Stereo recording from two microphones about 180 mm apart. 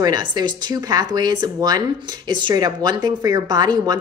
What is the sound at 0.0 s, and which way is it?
A woman's voice, 20° right (ahead or behind).